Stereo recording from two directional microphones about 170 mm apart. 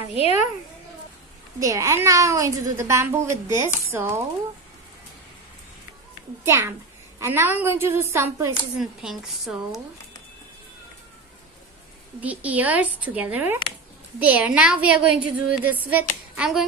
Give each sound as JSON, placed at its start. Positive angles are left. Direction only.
{"t": 0.1, "sound": "a child's voice", "side_deg": 35}
{"t": 1.6, "sound": "a woman's voice", "side_deg": -20}
{"t": 6.4, "sound": "a woman's voice", "side_deg": -15}
{"t": 9.0, "sound": "a woman's voice", "side_deg": 0}
{"t": 12.2, "sound": "a woman's voice", "side_deg": -10}